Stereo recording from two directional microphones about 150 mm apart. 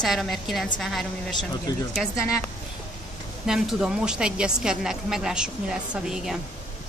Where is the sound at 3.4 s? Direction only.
5° right (ahead or behind).